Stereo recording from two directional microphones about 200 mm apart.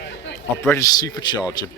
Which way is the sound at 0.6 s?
15° left (ahead or behind).